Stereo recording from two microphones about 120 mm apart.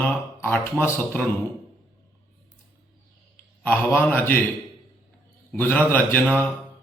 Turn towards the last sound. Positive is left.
turn(degrees=15)  # may be behind; listen again after turning